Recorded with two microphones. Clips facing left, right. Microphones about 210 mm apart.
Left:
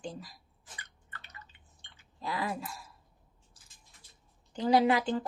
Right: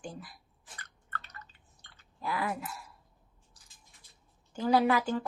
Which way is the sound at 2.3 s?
30° left (ahead or behind).